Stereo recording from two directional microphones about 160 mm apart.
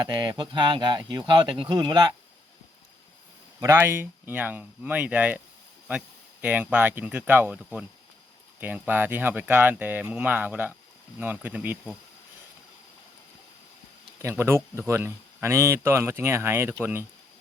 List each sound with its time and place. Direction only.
0.0 s speech: 25° right (ahead or behind)
3.6 s speech: 15° right (ahead or behind)
6.4 s speech: 10° right (ahead or behind)
8.9 s speech: 10° right (ahead or behind)
14.2 s speech: 15° right (ahead or behind)